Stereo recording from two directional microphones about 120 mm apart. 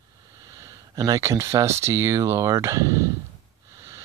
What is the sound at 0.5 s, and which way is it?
Speech, 30° right (ahead or behind).